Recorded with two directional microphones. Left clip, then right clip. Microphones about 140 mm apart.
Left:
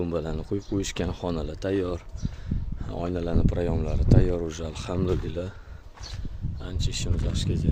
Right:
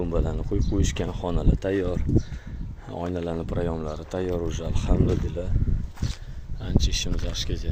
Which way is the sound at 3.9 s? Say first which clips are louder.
Left 2 dB; 20° left (ahead or behind).